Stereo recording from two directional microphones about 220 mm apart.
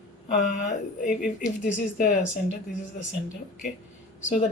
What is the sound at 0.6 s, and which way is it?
Speech, 35° left (ahead or behind).